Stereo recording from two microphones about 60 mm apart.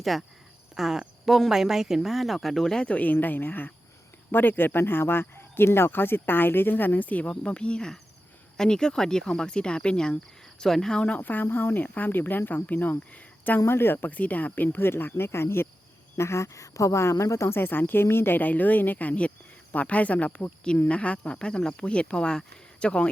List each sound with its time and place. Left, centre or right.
0.0 s speech: centre
2.8 s speech: left; by 11.0 s centre
11.0 s speech: left
13.7 s speech: left
17.6 s speech: left; by 23.0 s centre